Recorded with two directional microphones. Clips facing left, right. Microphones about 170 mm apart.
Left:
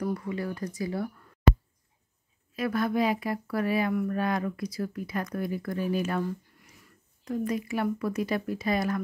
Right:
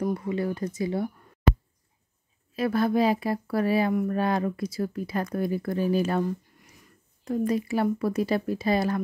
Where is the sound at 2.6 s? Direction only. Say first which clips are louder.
Right 3 dB; 30° right (ahead or behind).